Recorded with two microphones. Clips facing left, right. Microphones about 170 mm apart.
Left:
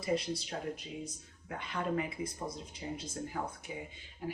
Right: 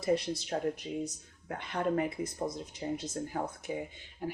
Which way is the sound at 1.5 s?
50° right (ahead or behind).